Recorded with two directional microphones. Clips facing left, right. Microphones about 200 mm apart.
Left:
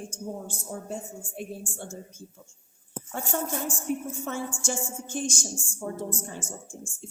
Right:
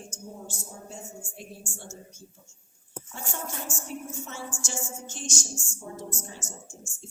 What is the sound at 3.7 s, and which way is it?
A woman's voice, 55° left (ahead or behind).